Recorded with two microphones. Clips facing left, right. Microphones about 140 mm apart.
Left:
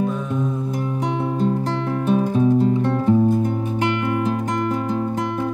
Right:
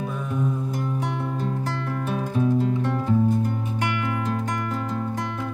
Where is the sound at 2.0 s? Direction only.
20° left (ahead or behind).